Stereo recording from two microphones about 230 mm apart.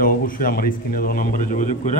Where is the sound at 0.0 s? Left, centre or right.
Left.